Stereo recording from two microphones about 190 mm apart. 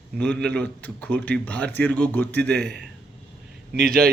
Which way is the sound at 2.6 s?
60° right (ahead or behind).